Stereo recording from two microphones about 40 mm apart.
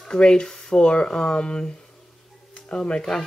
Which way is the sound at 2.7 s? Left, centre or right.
Left.